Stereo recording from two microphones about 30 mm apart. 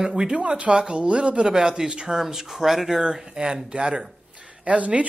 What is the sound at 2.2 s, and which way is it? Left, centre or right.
Speech, centre.